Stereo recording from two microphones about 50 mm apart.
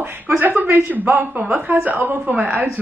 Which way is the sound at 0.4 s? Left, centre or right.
Right.